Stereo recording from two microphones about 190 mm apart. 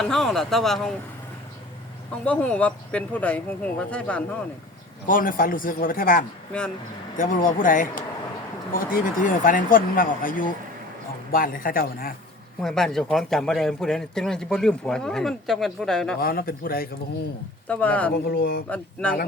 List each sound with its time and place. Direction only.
0.0 s speech: centre (ahead or behind)
2.2 s speech: 5° left (ahead or behind)
5.0 s speech: 45° left (ahead or behind)
12.6 s speech: centre (ahead or behind)
16.2 s speech: 50° left (ahead or behind)
17.7 s speech: 5° left (ahead or behind)
18.1 s speech: 55° left (ahead or behind)